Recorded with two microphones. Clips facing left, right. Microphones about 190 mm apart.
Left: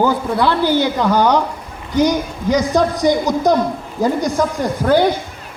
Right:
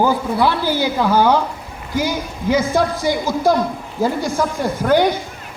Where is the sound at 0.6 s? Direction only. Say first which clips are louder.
Left 5 dB; 20° left (ahead or behind).